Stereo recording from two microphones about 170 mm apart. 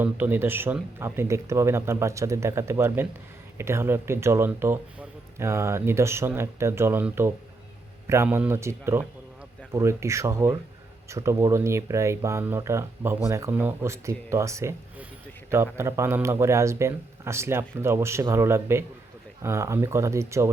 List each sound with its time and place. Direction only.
0.0 s speech: 10° right (ahead or behind)